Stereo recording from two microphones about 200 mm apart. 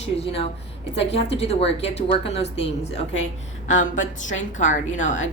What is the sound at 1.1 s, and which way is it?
A woman's voice, 30° left (ahead or behind).